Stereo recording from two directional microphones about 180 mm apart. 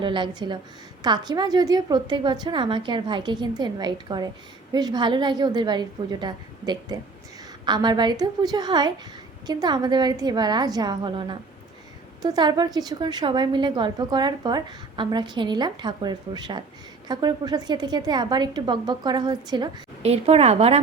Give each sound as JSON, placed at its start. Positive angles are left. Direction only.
{"t": 0.0, "sound": "a woman's voice", "side_deg": -25}
{"t": 20.0, "sound": "a woman's voice", "side_deg": -35}